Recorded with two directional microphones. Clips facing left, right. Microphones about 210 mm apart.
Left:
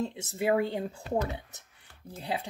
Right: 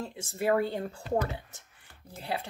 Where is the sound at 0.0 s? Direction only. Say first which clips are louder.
Left 1 dB; 20° left (ahead or behind).